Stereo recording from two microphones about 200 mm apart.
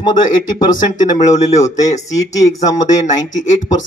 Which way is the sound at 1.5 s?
35° left (ahead or behind).